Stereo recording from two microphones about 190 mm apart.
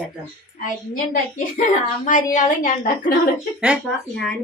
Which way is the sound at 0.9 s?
45° left (ahead or behind).